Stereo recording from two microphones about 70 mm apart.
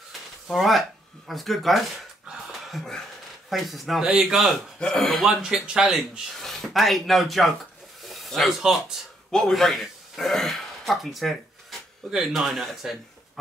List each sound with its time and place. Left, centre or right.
0.5 s speech: centre
2.5 s wheeze: centre
3.4 s speech: centre
4.0 s speech: centre
4.7 s speech: centre
5.2 s speech: centre
6.4 s speech: centre
9.3 s speech: centre